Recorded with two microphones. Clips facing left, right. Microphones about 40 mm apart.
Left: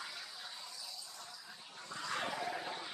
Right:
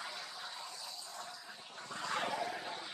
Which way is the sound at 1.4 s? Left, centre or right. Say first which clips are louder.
Right 2 dB; right.